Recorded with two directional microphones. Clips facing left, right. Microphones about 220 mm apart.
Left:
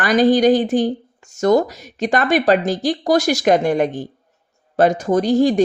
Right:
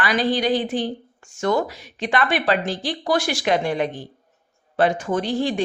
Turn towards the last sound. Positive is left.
turn(degrees=40)  # may be behind; listen again after turning